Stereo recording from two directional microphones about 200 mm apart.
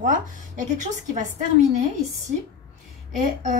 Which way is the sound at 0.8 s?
35° right (ahead or behind).